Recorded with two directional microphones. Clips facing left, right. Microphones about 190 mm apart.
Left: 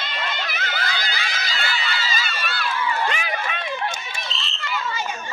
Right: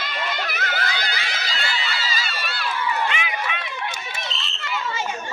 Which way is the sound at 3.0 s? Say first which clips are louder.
Left 1 dB; 40° left (ahead or behind).